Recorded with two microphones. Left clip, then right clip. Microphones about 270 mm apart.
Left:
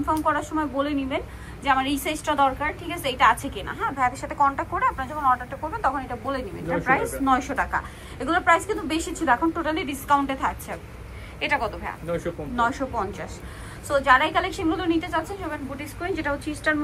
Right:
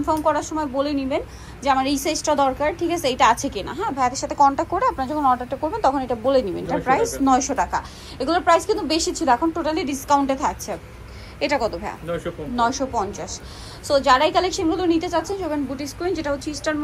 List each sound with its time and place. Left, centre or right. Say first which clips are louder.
0.0 s a woman's voice: right 3 dB; right
8.9 s a woman's voice: right 6 dB; centre
9.2 s a woman's voice: right 1 dB; centre